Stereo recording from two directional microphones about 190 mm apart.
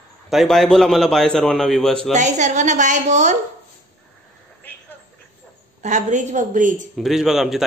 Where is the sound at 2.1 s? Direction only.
40° right (ahead or behind).